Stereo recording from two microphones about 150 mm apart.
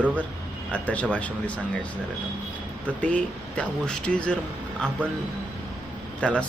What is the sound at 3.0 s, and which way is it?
Speech, 10° left (ahead or behind).